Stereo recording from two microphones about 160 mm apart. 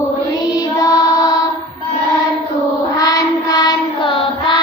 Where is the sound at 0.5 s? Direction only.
25° left (ahead or behind).